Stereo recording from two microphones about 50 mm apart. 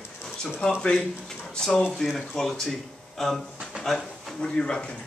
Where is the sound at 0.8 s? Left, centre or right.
Centre.